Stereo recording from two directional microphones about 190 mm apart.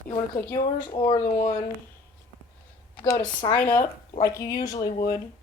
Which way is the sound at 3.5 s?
10° left (ahead or behind).